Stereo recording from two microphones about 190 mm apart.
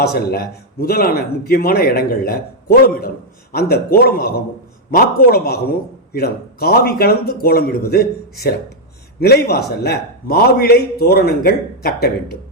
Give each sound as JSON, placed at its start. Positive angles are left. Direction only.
{"t": 0.0, "sound": "a man's voice", "side_deg": 60}